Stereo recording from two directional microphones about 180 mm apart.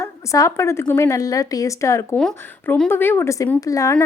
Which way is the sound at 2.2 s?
5° left (ahead or behind).